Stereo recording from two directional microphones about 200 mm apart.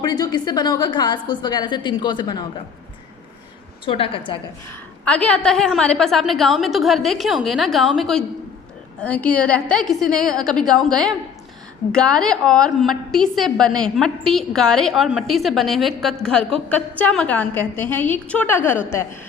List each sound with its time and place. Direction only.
0.0 s a woman's voice: 20° left (ahead or behind)
3.8 s a woman's voice: 25° left (ahead or behind)
4.7 s a woman's voice: 5° left (ahead or behind)